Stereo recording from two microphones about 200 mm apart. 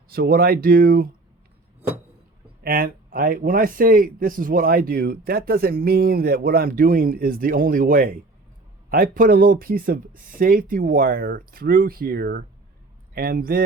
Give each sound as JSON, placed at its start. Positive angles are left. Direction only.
{"t": 0.1, "sound": "speech", "side_deg": -50}
{"t": 2.6, "sound": "speech", "side_deg": -45}